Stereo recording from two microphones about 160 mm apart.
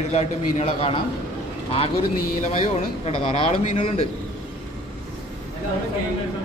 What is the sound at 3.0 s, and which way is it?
Speech, 35° left (ahead or behind).